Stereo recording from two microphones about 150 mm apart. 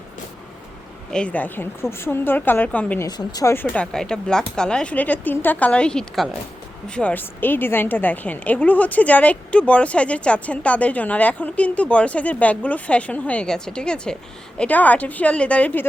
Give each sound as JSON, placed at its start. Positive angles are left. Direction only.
{"t": 1.1, "sound": "a woman's voice", "side_deg": 10}
{"t": 3.1, "sound": "speech", "side_deg": 25}
{"t": 3.5, "sound": "a woman's voice", "side_deg": 10}